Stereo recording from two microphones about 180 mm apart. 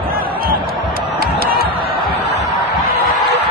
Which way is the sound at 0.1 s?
55° right (ahead or behind).